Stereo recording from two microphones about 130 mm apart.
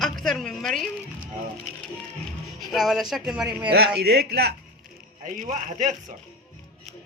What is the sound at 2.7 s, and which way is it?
Speech, centre (ahead or behind).